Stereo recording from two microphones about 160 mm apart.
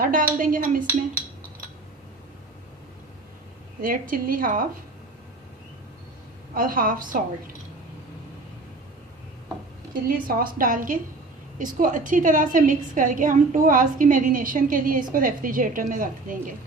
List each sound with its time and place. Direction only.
0.0 s a woman's voice: 60° right (ahead or behind)
3.8 s a woman's voice: 60° right (ahead or behind)
6.5 s a woman's voice: 60° right (ahead or behind)
9.9 s a woman's voice: 65° right (ahead or behind)